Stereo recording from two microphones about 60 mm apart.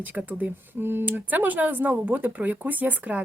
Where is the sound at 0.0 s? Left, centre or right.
Right.